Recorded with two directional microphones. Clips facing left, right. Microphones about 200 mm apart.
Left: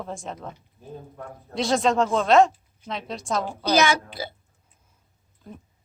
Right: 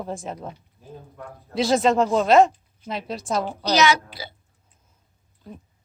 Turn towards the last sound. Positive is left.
turn(degrees=50)  # may be behind; listen again after turning